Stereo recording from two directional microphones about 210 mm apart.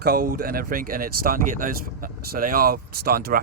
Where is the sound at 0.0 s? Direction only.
45° right (ahead or behind).